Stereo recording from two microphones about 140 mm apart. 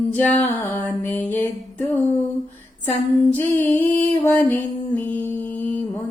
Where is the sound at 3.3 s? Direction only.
15° left (ahead or behind).